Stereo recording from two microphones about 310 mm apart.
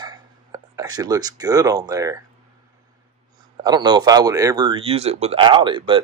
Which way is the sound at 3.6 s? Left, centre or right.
Centre.